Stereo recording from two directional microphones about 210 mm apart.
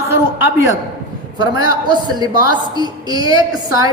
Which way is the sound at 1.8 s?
20° right (ahead or behind).